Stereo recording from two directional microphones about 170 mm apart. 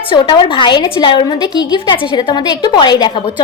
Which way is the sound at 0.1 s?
30° left (ahead or behind).